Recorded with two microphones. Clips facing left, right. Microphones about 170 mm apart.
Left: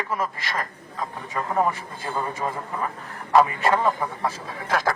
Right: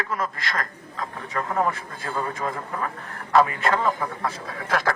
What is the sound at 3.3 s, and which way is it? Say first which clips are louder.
Speech: left 1 dB; 15° left (ahead or behind).